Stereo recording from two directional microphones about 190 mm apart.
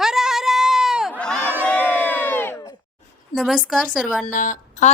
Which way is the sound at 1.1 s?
5° left (ahead or behind).